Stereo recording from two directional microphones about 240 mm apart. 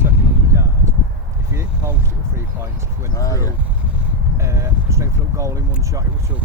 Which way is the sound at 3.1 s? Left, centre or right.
Centre.